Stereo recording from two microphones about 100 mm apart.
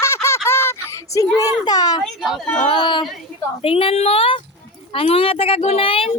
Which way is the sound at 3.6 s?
75° left (ahead or behind).